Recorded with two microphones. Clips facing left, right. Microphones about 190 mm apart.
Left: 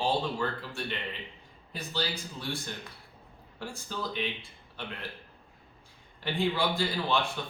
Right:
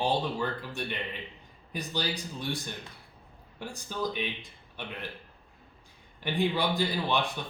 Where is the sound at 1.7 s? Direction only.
15° right (ahead or behind).